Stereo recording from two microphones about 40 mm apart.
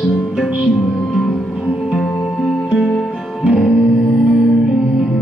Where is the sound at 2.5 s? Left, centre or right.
Centre.